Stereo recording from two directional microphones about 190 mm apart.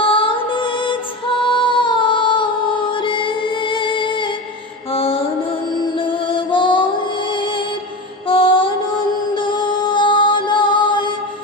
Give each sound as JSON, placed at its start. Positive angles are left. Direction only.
{"t": 0.0, "sound": "music", "side_deg": 30}
{"t": 1.5, "sound": "a sound", "side_deg": 25}
{"t": 2.9, "sound": "music", "side_deg": 25}